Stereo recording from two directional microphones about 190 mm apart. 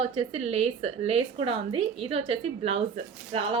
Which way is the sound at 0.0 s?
30° right (ahead or behind).